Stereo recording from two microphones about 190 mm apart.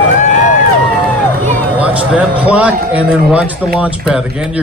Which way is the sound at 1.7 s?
5° right (ahead or behind).